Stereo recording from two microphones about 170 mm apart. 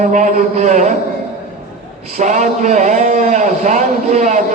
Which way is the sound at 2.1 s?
45° right (ahead or behind).